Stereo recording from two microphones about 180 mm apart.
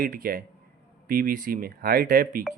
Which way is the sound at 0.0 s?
50° right (ahead or behind).